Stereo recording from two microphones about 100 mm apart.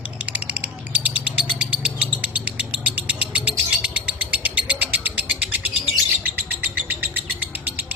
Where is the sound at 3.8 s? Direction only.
15° right (ahead or behind).